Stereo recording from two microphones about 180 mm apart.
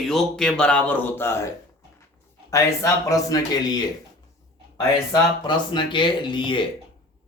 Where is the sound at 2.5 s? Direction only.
15° left (ahead or behind).